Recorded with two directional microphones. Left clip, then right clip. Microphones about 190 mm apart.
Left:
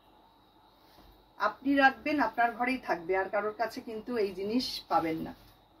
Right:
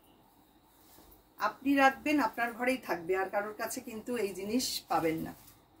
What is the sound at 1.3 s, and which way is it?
Speech, 15° right (ahead or behind).